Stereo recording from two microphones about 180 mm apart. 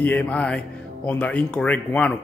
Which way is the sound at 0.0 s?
10° left (ahead or behind).